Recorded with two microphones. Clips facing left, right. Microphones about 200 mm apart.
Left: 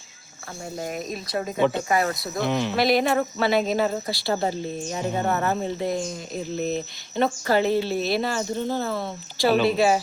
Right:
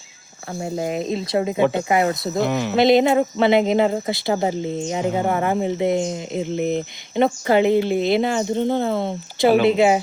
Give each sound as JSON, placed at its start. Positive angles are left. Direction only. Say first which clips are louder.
{"t": 0.6, "sound": "speech", "louder": "right 7 dB", "side_deg": -20}
{"t": 2.5, "sound": "speech", "louder": "right 2 dB", "side_deg": -5}
{"t": 2.7, "sound": "speech", "louder": "right 7 dB", "side_deg": -20}